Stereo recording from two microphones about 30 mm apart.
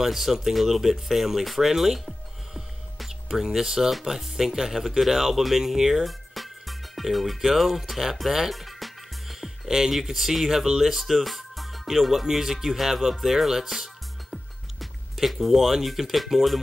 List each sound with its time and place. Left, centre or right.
0.0 s speech: centre
1.7 s music: centre
3.1 s speech: centre
6.0 s music: centre
9.7 s speech: centre
9.9 s speech: centre
11.1 s music: centre
12.3 s speech: centre
15.1 s speech: centre